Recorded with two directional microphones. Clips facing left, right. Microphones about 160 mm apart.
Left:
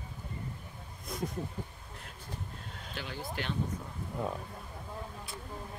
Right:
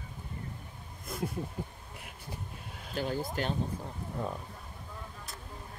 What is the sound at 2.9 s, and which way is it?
Speech, 45° right (ahead or behind).